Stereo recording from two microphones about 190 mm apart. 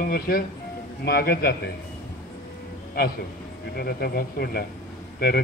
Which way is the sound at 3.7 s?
55° left (ahead or behind).